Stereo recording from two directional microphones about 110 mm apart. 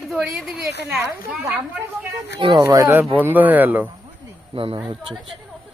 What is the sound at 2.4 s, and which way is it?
Speech, 45° right (ahead or behind).